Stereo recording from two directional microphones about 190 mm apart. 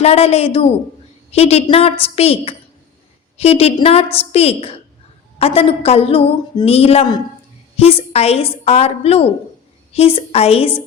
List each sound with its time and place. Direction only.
0.0 s a woman's voice: 35° left (ahead or behind)